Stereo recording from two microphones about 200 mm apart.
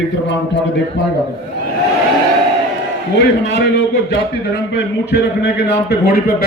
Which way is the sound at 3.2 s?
60° left (ahead or behind).